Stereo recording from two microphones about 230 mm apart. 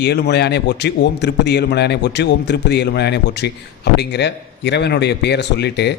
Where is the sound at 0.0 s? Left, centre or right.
Left.